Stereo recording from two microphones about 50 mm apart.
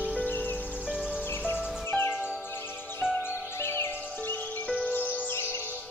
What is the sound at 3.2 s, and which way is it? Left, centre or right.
Music, left.